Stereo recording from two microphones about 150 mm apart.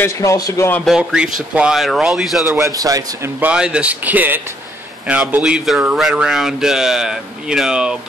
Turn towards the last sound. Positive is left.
turn(degrees=-5)  # may be behind; listen again after turning